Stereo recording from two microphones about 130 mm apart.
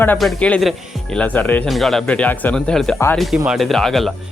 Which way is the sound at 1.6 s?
Centre (ahead or behind).